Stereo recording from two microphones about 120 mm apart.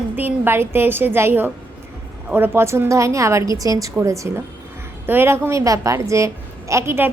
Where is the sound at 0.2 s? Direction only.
15° right (ahead or behind).